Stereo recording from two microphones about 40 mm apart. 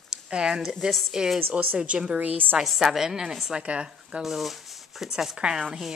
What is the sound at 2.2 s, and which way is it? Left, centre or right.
Speech, right.